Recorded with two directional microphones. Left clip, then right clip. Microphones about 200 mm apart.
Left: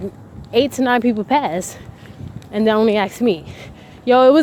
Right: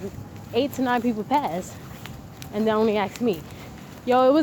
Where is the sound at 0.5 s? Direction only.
65° left (ahead or behind).